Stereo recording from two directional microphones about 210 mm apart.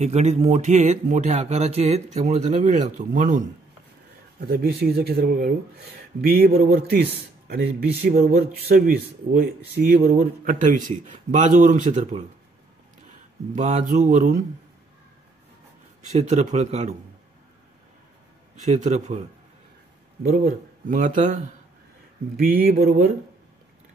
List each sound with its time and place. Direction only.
0.0 s speech: 30° right (ahead or behind)
4.4 s speech: 50° right (ahead or behind); by 12.3 s 35° right (ahead or behind)
13.6 s speech: 35° right (ahead or behind)
16.1 s speech: 35° right (ahead or behind)
18.6 s speech: 35° right (ahead or behind)
20.2 s speech: 40° right (ahead or behind)
22.4 s speech: 45° right (ahead or behind)